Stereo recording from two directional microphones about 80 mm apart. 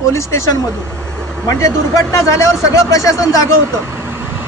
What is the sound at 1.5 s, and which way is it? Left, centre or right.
Speech, left.